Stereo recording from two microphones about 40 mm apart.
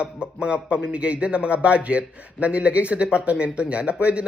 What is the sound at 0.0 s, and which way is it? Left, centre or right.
Speech, right.